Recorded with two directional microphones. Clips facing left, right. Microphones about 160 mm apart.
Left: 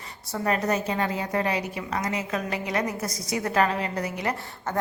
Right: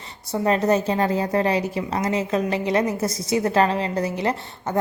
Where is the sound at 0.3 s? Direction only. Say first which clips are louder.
Right 6 dB; 25° right (ahead or behind).